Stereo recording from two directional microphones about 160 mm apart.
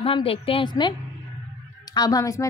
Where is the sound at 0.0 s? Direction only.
35° left (ahead or behind).